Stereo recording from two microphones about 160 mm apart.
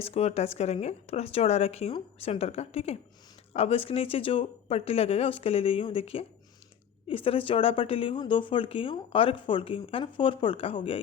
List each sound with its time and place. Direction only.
0.0 s speech: 40° left (ahead or behind)